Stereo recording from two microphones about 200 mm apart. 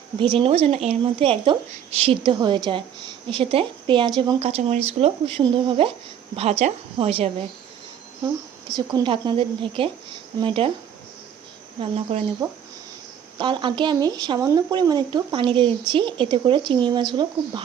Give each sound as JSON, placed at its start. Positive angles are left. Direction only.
{"t": 0.2, "sound": "a woman's voice", "side_deg": -25}
{"t": 11.8, "sound": "a woman's voice", "side_deg": -30}